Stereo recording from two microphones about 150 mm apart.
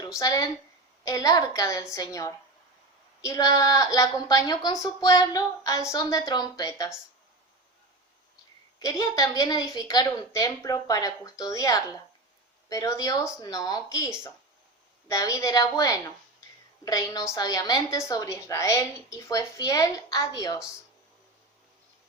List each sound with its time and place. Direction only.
0.2 s a woman's voice: 25° left (ahead or behind)
8.8 s a woman's voice: 25° left (ahead or behind)